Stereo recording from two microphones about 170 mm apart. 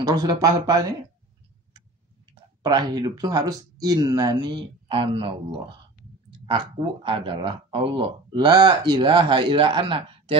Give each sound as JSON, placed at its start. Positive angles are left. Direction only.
{"t": 0.0, "sound": "speech", "side_deg": -20}
{"t": 2.6, "sound": "speech", "side_deg": -25}
{"t": 6.4, "sound": "speech", "side_deg": -30}